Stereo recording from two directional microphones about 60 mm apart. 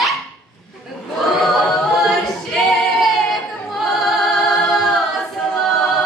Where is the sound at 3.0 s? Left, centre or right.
Centre.